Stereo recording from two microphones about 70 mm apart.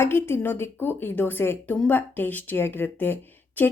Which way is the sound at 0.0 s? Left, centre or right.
Left.